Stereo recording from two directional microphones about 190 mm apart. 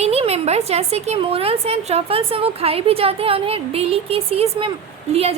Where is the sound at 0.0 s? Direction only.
35° right (ahead or behind).